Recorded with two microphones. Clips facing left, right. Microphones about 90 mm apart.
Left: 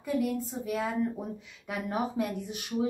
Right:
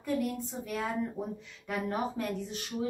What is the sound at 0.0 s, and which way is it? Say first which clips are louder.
A woman's voice: left 2 dB; centre (ahead or behind).